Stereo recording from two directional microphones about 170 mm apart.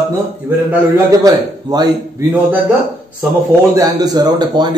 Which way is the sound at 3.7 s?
20° right (ahead or behind).